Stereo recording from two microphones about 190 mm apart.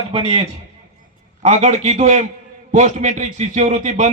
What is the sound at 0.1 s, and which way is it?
A man's voice, 30° right (ahead or behind).